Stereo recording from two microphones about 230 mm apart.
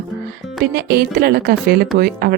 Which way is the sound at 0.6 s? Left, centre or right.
Right.